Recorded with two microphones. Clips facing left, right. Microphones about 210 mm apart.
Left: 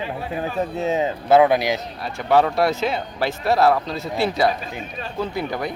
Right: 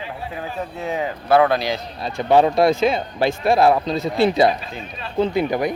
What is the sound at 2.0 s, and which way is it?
A man's voice, 20° right (ahead or behind).